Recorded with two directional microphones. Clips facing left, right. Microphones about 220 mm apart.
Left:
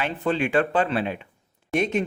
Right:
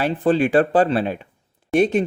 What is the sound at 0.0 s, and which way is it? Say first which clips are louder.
Speech: right 6 dB; 35° right (ahead or behind).